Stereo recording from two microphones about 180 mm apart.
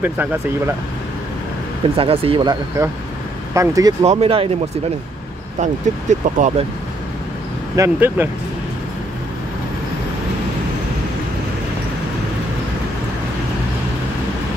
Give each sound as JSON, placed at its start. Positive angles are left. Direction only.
{"t": 0.0, "sound": "speech", "side_deg": -10}
{"t": 2.0, "sound": "speech", "side_deg": -30}
{"t": 2.8, "sound": "speech", "side_deg": -15}
{"t": 4.0, "sound": "speech", "side_deg": -35}
{"t": 5.6, "sound": "speech", "side_deg": -40}
{"t": 7.7, "sound": "speech", "side_deg": -15}